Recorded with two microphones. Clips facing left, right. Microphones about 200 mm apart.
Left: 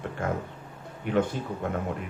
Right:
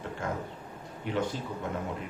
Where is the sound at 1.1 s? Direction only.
55° left (ahead or behind).